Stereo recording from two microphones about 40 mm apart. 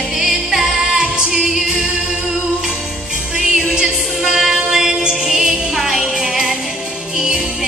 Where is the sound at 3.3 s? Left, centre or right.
Centre.